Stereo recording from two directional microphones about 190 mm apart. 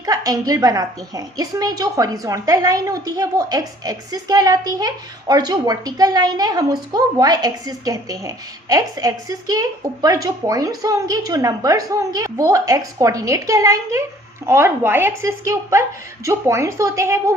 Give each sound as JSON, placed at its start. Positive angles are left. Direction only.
{"t": 0.0, "sound": "a woman's voice", "side_deg": -20}